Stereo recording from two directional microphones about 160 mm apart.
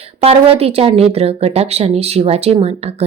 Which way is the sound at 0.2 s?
40° right (ahead or behind).